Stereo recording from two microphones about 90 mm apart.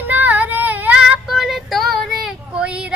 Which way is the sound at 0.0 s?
20° right (ahead or behind).